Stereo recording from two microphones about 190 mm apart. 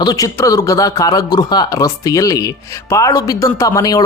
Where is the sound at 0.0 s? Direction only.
20° left (ahead or behind).